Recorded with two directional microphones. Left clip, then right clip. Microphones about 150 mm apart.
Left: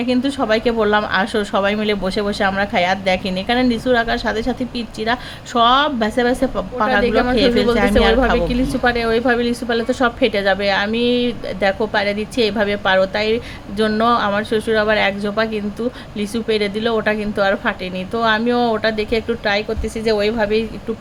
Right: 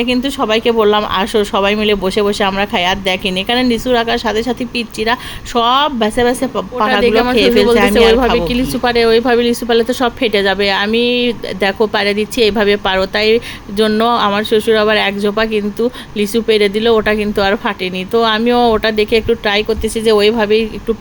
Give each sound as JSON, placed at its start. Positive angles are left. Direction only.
{"t": 0.0, "sound": "a woman's voice", "side_deg": -10}